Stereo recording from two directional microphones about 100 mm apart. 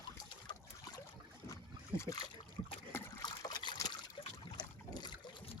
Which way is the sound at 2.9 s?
25° left (ahead or behind).